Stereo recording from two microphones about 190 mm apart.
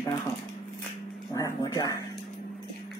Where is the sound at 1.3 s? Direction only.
15° left (ahead or behind).